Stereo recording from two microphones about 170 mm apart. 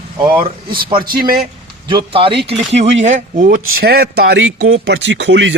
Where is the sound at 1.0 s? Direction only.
60° right (ahead or behind).